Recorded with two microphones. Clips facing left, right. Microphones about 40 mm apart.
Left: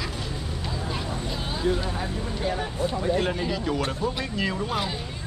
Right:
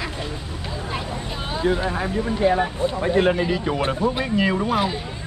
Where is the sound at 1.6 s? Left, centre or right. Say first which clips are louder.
Right 5 dB; right; by 5.0 s centre.